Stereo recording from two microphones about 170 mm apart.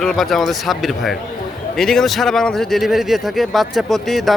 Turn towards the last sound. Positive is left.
turn(degrees=0)  # may be behind; listen again after turning